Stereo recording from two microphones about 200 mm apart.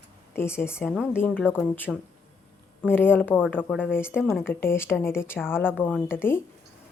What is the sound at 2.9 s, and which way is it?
Speech, 10° left (ahead or behind).